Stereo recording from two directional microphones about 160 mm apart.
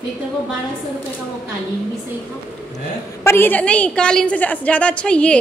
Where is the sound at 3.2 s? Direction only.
15° left (ahead or behind).